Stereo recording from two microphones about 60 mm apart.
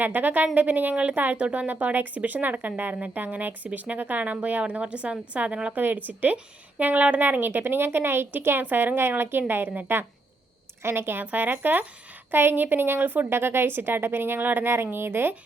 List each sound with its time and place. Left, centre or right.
0.0 s speech: right
13.3 s speech: right